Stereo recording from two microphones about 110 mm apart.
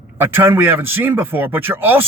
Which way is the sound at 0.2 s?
20° right (ahead or behind).